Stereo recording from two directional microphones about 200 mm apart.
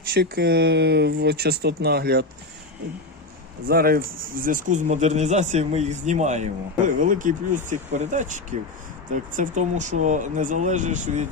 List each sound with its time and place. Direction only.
0.1 s speech: 55° right (ahead or behind)
3.7 s speech: 50° right (ahead or behind)